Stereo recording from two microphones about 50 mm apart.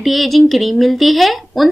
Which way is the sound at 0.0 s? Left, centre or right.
Centre.